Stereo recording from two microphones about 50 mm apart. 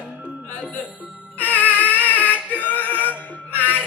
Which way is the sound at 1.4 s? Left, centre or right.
Left.